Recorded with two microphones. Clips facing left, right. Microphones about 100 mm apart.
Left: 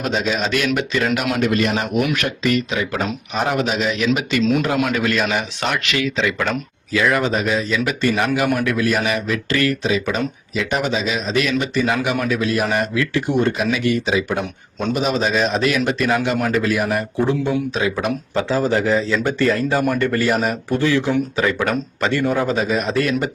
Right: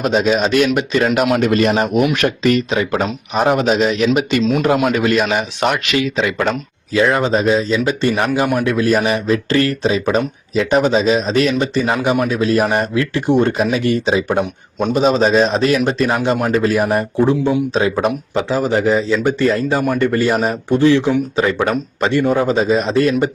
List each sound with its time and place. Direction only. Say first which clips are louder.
0.0 s speech: right 6 dB; 20° right (ahead or behind)
0.9 s speech: right 8 dB; 35° right (ahead or behind)
4.9 s a man's voice: right 4 dB; 15° right (ahead or behind); by 18.1 s 35° right (ahead or behind)
18.3 s speech: even; 15° right (ahead or behind)